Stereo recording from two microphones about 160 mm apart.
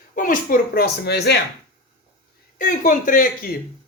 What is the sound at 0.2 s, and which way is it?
Speech, 60° left (ahead or behind).